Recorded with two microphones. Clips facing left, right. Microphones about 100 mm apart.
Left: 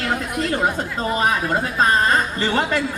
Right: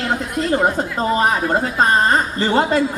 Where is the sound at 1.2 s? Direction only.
30° right (ahead or behind).